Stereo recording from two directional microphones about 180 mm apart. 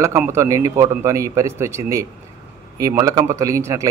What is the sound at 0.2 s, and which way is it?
A man's voice, 15° right (ahead or behind).